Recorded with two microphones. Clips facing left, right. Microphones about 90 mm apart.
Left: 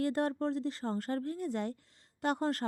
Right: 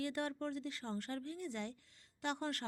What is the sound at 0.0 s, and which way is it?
Speech, 35° left (ahead or behind).